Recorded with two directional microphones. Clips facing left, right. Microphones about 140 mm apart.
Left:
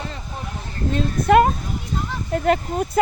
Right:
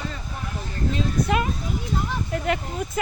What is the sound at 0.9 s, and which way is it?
Speech, 50° left (ahead or behind).